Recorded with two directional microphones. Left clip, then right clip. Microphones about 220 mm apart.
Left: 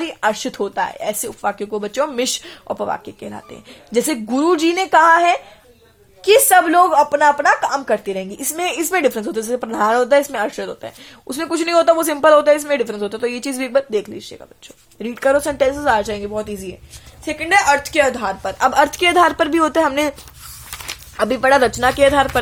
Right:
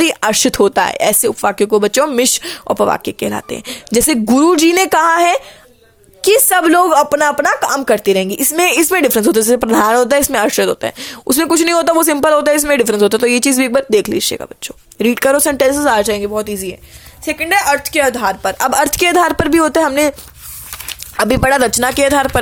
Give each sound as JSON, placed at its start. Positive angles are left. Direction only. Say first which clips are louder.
{"t": 0.0, "sound": "a woman's voice", "louder": "right 7 dB", "side_deg": -45}
{"t": 21.2, "sound": "a woman's voice", "louder": "right 2 dB", "side_deg": -30}